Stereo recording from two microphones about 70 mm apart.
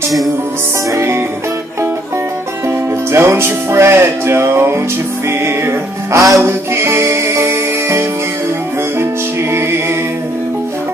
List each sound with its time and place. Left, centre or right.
0.9 s music: right
3.1 s music: right